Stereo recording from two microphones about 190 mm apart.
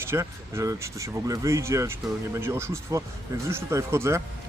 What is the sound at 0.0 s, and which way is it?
Speech, 15° right (ahead or behind).